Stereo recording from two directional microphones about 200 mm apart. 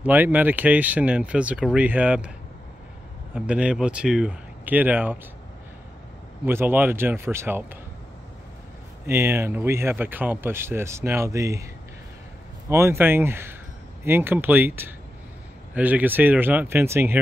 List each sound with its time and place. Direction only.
0.0 s speech: 10° right (ahead or behind)
3.3 s speech: 5° right (ahead or behind)
6.4 s speech: 10° right (ahead or behind)
9.0 s speech: 10° right (ahead or behind)
12.6 s speech: 15° right (ahead or behind)